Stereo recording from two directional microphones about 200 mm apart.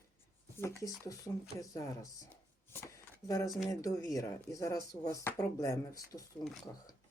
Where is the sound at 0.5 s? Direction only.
15° left (ahead or behind).